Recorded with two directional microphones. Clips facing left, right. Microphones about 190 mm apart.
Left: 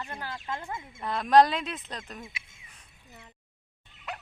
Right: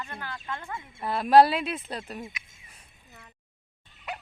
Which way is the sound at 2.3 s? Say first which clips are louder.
Even; 30° left (ahead or behind).